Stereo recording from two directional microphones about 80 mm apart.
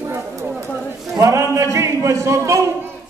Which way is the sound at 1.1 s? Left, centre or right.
Right.